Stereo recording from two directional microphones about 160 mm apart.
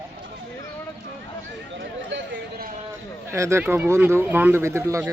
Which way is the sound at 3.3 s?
15° right (ahead or behind).